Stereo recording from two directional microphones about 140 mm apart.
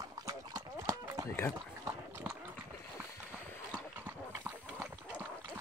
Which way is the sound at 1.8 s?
15° right (ahead or behind).